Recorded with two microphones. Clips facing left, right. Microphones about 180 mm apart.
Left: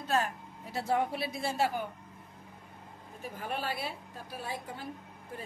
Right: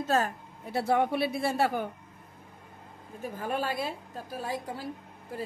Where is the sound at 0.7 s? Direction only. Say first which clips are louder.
Right 5 dB; 65° right (ahead or behind).